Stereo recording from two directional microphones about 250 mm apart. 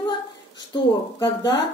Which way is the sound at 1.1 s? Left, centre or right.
Centre.